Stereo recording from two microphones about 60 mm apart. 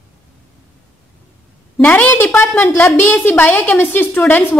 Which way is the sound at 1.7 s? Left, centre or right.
Left.